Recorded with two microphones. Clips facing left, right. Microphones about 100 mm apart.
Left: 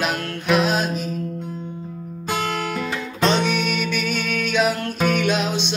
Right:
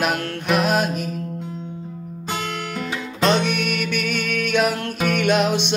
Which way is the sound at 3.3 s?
55° right (ahead or behind).